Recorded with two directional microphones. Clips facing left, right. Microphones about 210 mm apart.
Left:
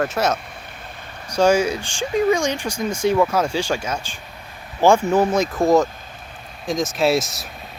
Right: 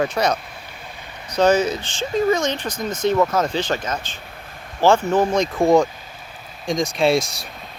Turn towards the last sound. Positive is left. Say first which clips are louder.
# right 1 dB
turn(degrees=0)  # may be behind; listen again after turning